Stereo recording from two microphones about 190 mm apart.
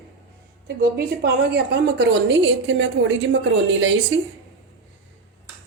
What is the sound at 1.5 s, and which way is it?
A woman's voice, 65° right (ahead or behind).